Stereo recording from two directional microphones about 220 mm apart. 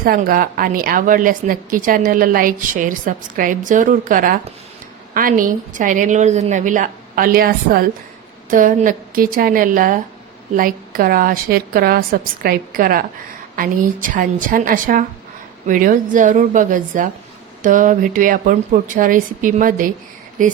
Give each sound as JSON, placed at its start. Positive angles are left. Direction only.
{"t": 0.0, "sound": "a woman's voice", "side_deg": -40}